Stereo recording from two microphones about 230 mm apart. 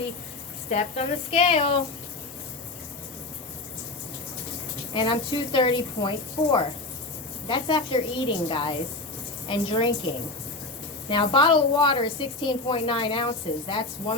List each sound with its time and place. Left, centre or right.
0.7 s a woman's voice: left
4.9 s a woman's voice: left
11.1 s a woman's voice: left